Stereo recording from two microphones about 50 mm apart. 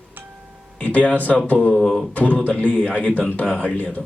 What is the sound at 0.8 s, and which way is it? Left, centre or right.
Speech, left.